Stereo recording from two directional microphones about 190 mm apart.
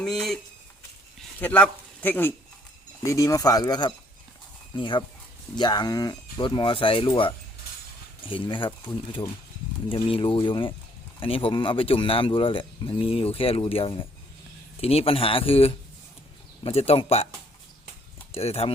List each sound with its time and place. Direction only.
0.0 s speech: centre (ahead or behind)
1.4 s a man's voice: 10° left (ahead or behind); by 7.1 s 30° left (ahead or behind)
8.3 s speech: 25° left (ahead or behind)
9.9 s speech: 30° left (ahead or behind)
18.3 s speech: 30° left (ahead or behind)